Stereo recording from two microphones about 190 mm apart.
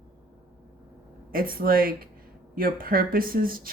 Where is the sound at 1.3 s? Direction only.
50° right (ahead or behind).